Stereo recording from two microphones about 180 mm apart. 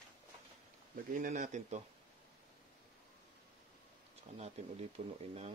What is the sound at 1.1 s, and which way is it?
Speech, 45° right (ahead or behind).